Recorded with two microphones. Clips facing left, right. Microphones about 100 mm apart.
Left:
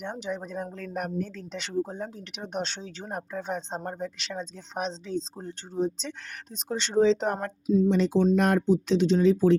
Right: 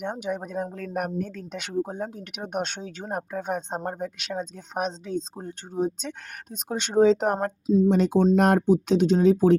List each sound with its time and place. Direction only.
0.0 s speech: 55° right (ahead or behind)